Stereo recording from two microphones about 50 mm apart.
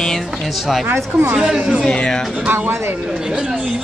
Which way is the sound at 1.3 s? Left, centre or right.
Centre.